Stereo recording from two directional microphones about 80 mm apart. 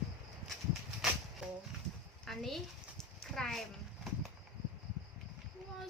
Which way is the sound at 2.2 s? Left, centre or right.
Centre.